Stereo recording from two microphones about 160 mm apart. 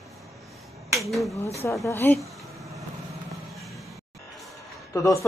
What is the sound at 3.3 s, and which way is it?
Music, centre (ahead or behind).